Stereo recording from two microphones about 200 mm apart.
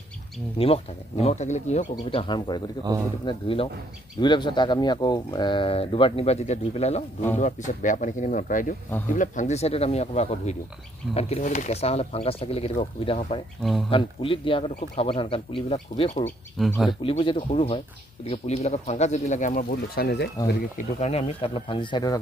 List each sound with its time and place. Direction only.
0.6 s speech: 30° left (ahead or behind)
13.6 s speech: centre (ahead or behind)
13.8 s speech: 25° left (ahead or behind)
16.3 s speech: 5° left (ahead or behind)
17.0 s speech: 25° left (ahead or behind); by 20.2 s 55° left (ahead or behind)
20.4 s speech: 40° left (ahead or behind); by 22.2 s 20° left (ahead or behind)